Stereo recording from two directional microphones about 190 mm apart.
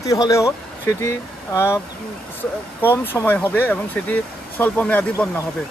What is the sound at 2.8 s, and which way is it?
Speech, 10° left (ahead or behind).